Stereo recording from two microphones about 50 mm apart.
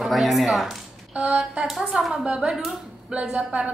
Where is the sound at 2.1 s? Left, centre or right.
Centre.